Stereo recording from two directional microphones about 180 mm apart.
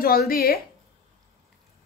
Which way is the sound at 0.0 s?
55° left (ahead or behind).